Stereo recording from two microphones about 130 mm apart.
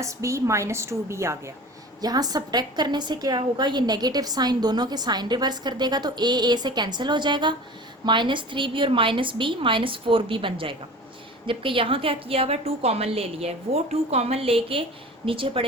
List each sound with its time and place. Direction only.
0.0 s a woman's voice: 25° right (ahead or behind); by 15.6 s 40° right (ahead or behind)